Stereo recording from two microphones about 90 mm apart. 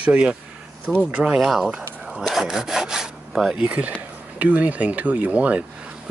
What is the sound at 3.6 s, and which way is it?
Speech, 15° right (ahead or behind).